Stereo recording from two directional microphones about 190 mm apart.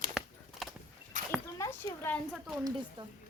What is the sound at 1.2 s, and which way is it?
Dog, 40° right (ahead or behind).